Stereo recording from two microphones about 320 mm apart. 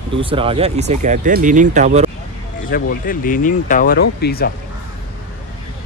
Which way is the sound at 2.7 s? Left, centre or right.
Left.